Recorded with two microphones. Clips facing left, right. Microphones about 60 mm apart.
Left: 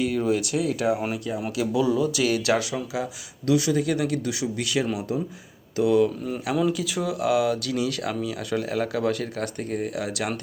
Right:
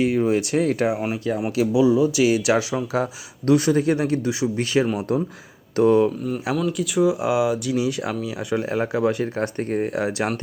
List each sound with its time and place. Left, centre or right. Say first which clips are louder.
0.0 s speech: right 4 dB; right
1.7 s speech: right 5 dB; centre
2.9 s speech: right 6 dB; right
5.7 s speech: right 5 dB; right
6.6 s speech: left 2 dB; centre
7.0 s speech: right 4 dB; centre